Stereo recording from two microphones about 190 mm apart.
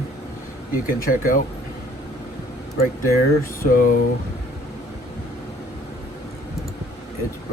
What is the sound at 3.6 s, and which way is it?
Speech, 45° left (ahead or behind).